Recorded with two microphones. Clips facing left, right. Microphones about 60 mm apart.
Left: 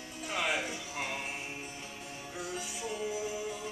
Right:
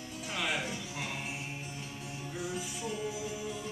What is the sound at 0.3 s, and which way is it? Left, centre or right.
Music, centre.